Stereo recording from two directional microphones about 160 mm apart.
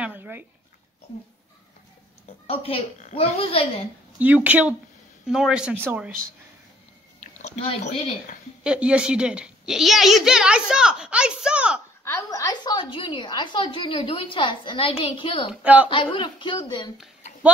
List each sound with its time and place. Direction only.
0.0 s a sound: 10° right (ahead or behind)
2.4 s a woman's voice: 35° left (ahead or behind)
4.2 s a woman's voice: 10° right (ahead or behind)
7.2 s a sound: 45° left (ahead or behind)
8.6 s a woman's voice: 5° right (ahead or behind)
12.0 s a woman's voice: 15° left (ahead or behind); by 15.5 s 35° left (ahead or behind)
15.5 s speech: 10° right (ahead or behind)
15.9 s a woman's voice: 30° left (ahead or behind)